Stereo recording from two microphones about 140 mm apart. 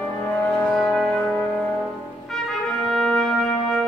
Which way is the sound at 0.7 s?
5° left (ahead or behind).